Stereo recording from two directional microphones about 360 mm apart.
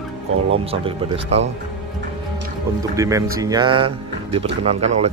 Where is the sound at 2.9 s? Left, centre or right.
Centre.